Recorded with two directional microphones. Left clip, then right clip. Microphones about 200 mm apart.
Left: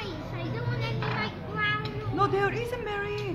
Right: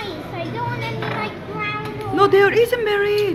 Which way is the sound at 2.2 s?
5° right (ahead or behind).